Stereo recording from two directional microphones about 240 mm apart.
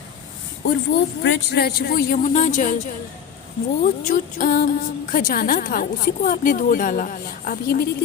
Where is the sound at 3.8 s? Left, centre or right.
Left.